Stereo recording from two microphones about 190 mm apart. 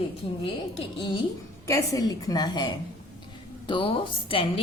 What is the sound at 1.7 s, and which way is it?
A woman's voice, 15° left (ahead or behind).